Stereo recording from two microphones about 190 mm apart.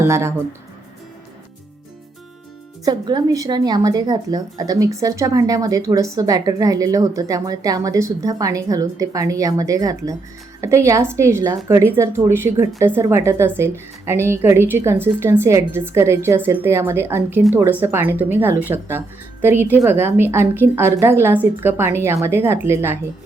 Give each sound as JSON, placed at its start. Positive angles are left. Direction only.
{"t": 0.0, "sound": "speech", "side_deg": -15}
{"t": 2.8, "sound": "speech", "side_deg": -20}